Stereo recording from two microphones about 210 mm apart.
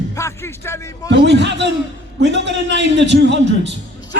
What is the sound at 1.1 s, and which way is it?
A man's voice, 55° right (ahead or behind).